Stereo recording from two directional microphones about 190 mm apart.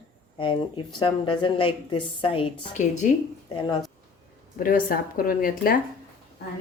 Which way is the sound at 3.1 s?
40° left (ahead or behind).